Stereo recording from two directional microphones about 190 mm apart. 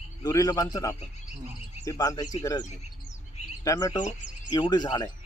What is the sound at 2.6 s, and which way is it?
Chirp, 40° left (ahead or behind).